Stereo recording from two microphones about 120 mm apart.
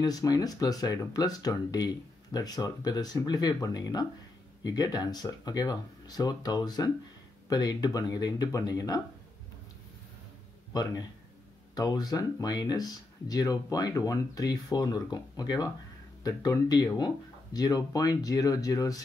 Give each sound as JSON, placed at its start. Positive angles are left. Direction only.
{"t": 0.0, "sound": "speech", "side_deg": 30}
{"t": 10.7, "sound": "speech", "side_deg": 35}